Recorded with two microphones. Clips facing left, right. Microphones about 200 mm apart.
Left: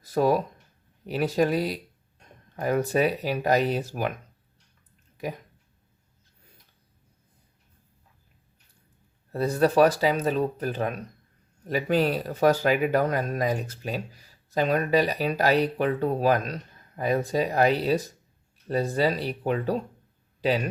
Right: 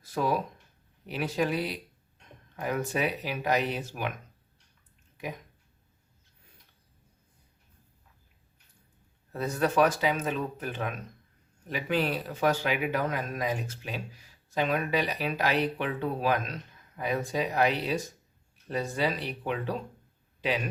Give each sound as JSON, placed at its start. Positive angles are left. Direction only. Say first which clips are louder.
{"t": 0.0, "sound": "a sound", "louder": "left 6 dB", "side_deg": 40}
{"t": 1.0, "sound": "speech", "louder": "left 6 dB", "side_deg": 40}
{"t": 9.3, "sound": "speech", "louder": "left 6 dB", "side_deg": 35}